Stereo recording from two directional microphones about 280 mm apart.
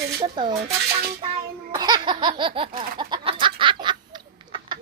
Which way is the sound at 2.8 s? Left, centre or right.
Centre.